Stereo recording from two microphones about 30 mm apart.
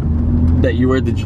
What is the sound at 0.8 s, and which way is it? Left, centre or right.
Speech, centre.